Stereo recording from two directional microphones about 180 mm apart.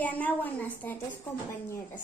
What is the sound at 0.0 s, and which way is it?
Speech, 10° left (ahead or behind).